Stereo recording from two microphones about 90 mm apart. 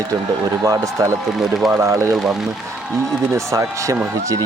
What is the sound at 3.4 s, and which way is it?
Speech, 35° right (ahead or behind).